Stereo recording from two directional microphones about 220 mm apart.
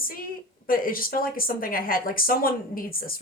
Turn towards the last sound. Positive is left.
turn(degrees=40)  # may be behind; listen again after turning